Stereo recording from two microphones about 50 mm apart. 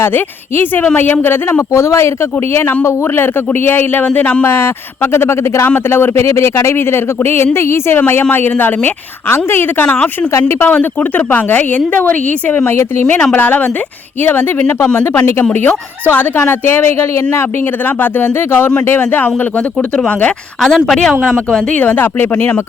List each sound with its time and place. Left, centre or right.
0.0 s speech: left
1.7 s speech: left
4.0 s speech: left
4.4 s speech: left
7.9 s speech: left
9.3 s speech: left
9.7 s speech: left
11.3 s speech: left
12.6 s speech: left
13.3 s speech: left
14.9 s speech: left
18.0 s speech: left
20.7 s speech: centre
21.8 s speech: left